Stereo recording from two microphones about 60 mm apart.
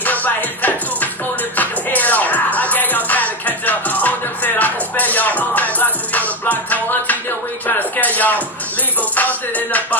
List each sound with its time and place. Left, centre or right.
0.0 s music: left